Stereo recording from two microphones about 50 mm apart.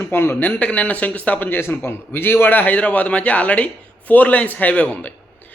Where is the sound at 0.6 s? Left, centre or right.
Left.